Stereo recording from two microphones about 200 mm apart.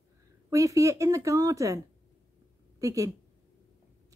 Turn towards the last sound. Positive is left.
turn(degrees=-15)  # may be behind; listen again after turning